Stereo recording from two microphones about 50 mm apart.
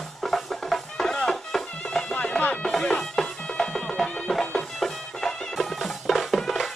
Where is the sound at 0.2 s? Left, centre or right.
Centre.